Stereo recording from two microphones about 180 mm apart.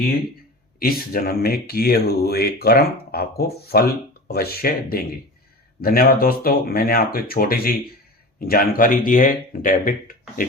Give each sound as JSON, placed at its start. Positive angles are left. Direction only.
{"t": 0.8, "sound": "speech", "side_deg": 55}